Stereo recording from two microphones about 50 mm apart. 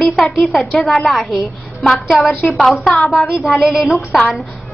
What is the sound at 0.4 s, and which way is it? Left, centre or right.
A woman's voice, centre.